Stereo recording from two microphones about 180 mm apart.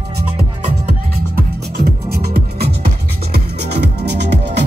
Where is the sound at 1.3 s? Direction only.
60° right (ahead or behind).